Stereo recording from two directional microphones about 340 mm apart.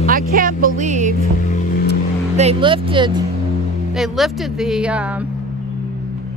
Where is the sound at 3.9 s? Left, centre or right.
Centre.